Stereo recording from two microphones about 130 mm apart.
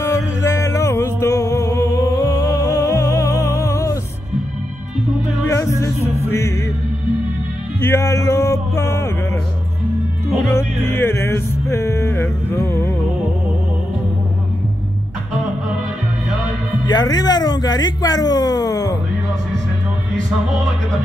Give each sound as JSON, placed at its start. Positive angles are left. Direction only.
{"t": 0.0, "sound": "music", "side_deg": 25}
{"t": 5.6, "sound": "music", "side_deg": 25}
{"t": 7.8, "sound": "music", "side_deg": 20}
{"t": 10.5, "sound": "music", "side_deg": 20}
{"t": 16.8, "sound": "a sound", "side_deg": 30}